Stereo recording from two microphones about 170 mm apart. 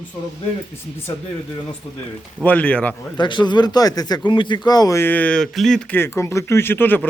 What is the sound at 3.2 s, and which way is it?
Speech, 25° left (ahead or behind).